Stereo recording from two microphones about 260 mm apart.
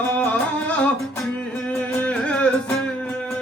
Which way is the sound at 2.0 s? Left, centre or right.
Centre.